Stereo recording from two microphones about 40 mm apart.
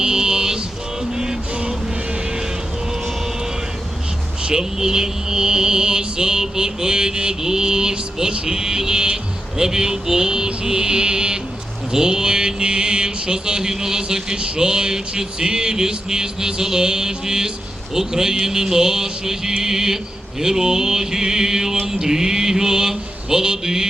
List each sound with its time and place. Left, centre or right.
0.0 s a sound: centre
1.1 s music: centre
4.4 s mantra: centre